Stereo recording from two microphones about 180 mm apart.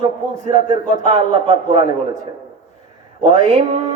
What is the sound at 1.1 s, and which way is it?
Speech, 30° right (ahead or behind).